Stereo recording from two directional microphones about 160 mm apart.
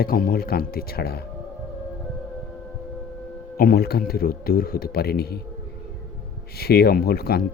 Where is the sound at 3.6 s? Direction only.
70° left (ahead or behind).